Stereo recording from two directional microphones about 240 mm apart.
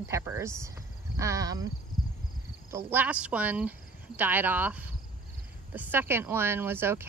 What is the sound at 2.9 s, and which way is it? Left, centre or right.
Speech, centre.